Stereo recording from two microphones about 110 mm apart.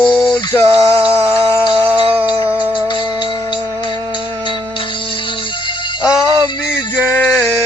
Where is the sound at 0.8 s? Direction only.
25° left (ahead or behind).